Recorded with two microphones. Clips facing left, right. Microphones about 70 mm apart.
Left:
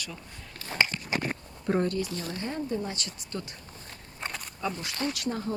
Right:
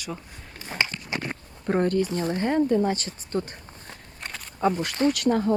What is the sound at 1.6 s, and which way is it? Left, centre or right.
Speech, right.